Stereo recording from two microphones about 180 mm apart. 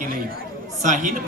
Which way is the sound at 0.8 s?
45° right (ahead or behind).